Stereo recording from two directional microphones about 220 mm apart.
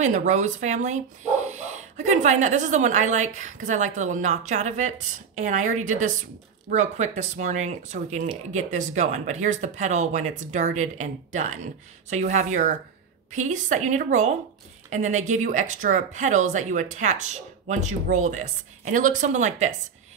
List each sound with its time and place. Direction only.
0.0 s speech: 35° right (ahead or behind)